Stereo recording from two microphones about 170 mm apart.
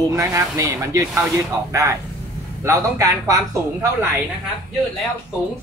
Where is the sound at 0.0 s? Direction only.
20° right (ahead or behind).